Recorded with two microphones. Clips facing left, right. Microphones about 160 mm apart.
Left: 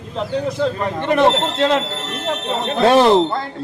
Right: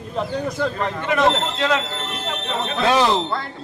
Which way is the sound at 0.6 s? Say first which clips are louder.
Left 3 dB; 25° left (ahead or behind).